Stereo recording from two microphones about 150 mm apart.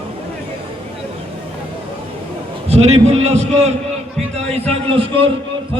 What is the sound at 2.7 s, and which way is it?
A man's voice, 45° right (ahead or behind).